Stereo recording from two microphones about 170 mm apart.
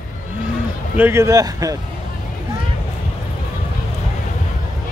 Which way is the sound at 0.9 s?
15° right (ahead or behind).